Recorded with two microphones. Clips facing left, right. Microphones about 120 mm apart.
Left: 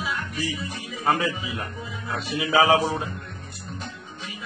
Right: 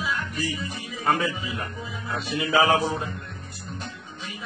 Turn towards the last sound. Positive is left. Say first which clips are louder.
# left 2 dB
turn(degrees=0)  # may be behind; listen again after turning